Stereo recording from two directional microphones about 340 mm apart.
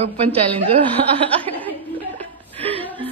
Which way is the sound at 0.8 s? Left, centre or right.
Centre.